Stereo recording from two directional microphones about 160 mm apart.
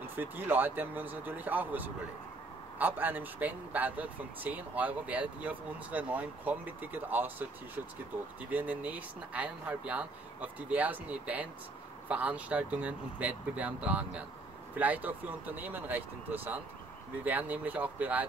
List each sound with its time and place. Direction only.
0.0 s speech: 10° right (ahead or behind)